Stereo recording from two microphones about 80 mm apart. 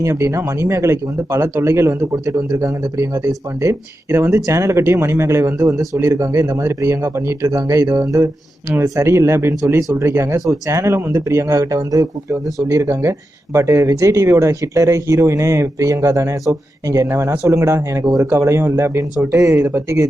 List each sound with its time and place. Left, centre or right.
0.0 s speech: right
19.3 s speech: right